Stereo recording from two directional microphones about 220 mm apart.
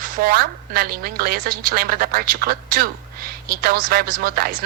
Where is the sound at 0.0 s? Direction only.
40° right (ahead or behind).